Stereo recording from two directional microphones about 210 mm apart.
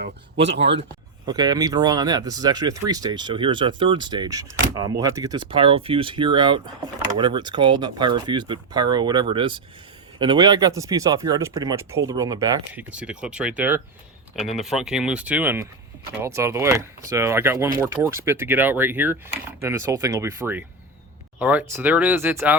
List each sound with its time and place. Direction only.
0.0 s speech: 55° right (ahead or behind)
1.3 s speech: 20° right (ahead or behind)
12.9 s speech: 5° right (ahead or behind)